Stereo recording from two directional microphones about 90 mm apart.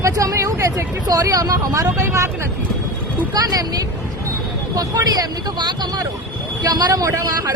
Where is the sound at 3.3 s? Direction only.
45° right (ahead or behind).